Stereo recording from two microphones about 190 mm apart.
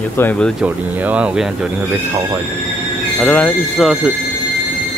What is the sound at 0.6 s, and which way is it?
Speech, 10° right (ahead or behind).